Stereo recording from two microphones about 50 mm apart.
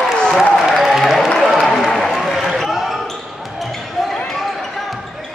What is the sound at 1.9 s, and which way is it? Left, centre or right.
Basketball bounce, centre.